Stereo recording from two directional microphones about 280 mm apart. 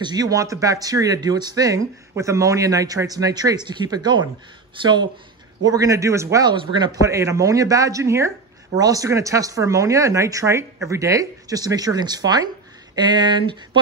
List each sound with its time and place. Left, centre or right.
0.0 s speech: centre